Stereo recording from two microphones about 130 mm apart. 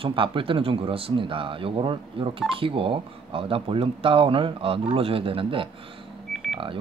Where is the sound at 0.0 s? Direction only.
40° right (ahead or behind).